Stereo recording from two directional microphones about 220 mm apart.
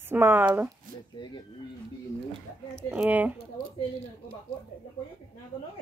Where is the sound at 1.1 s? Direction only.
20° left (ahead or behind).